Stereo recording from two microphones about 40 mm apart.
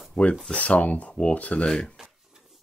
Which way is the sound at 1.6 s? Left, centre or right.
Centre.